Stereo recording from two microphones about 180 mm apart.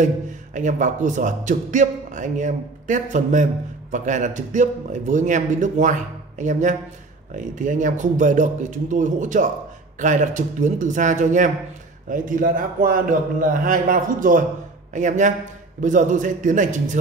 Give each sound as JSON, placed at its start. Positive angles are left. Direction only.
{"t": 0.6, "sound": "a man's voice", "side_deg": -45}